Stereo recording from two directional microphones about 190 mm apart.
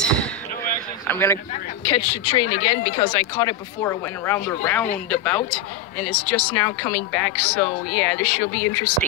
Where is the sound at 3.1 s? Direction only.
15° left (ahead or behind).